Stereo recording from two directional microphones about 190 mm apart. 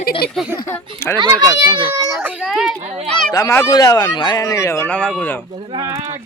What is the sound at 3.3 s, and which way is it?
Speech, 15° left (ahead or behind).